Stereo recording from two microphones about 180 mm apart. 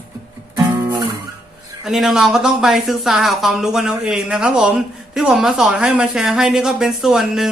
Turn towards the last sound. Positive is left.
turn(degrees=0)  # may be behind; listen again after turning